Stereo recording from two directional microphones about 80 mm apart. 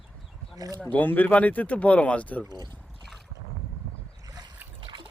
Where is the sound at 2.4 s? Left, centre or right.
Right.